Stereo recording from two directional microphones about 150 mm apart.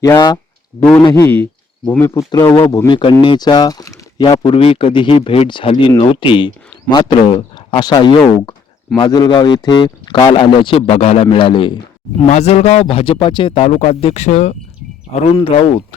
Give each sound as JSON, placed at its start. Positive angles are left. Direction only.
{"t": 0.0, "sound": "speech", "side_deg": 25}
{"t": 1.1, "sound": "speech", "side_deg": 15}
{"t": 4.3, "sound": "speech", "side_deg": 40}
{"t": 12.3, "sound": "speech", "side_deg": 45}